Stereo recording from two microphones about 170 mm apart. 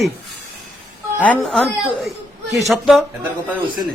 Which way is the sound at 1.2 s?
5° left (ahead or behind).